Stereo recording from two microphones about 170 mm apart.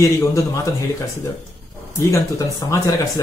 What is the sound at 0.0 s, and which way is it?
Speech, 20° left (ahead or behind).